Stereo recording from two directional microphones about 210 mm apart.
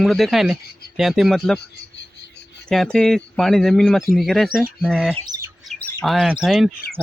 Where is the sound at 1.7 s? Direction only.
55° left (ahead or behind).